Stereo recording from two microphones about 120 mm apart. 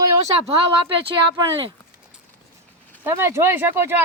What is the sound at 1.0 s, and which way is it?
Speech, 45° right (ahead or behind).